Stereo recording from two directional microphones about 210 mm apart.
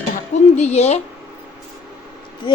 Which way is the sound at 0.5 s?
30° left (ahead or behind).